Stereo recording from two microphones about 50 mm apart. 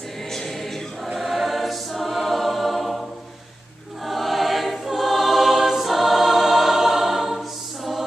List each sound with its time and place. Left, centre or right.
0.3 s choir: centre
4.0 s choir: centre